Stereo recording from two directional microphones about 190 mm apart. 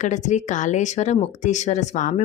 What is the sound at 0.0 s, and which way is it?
A woman's voice, 40° left (ahead or behind).